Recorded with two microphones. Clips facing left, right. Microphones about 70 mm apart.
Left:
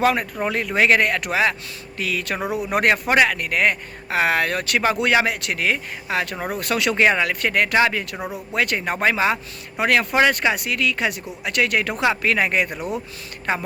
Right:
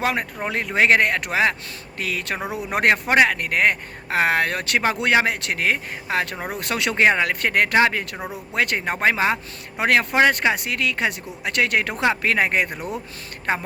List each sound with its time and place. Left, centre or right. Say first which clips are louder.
0.0 s speech: left 4 dB; right